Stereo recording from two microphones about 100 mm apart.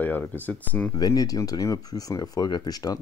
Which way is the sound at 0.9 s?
35° left (ahead or behind).